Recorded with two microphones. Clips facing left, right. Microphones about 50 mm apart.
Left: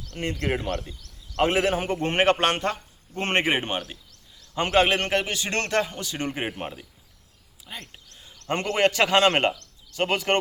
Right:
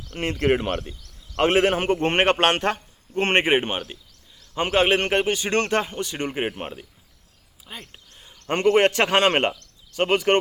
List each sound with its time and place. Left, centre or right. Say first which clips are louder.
0.1 s speech: right 3 dB; right
0.4 s a man's voice: right 8 dB; right
2.0 s a man's voice: right 1 dB; right
2.4 s a man's voice: right 3 dB; right
3.2 s speech: right 4 dB; right
4.9 s speech: right 3 dB; right
6.2 s speech: right 1 dB; centre
7.7 s a sound: even; centre
8.6 s a man's voice: right 4 dB; right